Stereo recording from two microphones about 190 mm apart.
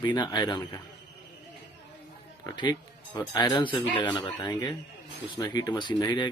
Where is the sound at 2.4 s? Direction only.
20° left (ahead or behind).